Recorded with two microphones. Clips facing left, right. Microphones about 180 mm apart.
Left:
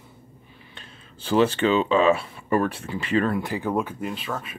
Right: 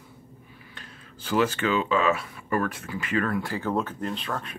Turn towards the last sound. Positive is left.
turn(degrees=5)  # may be behind; listen again after turning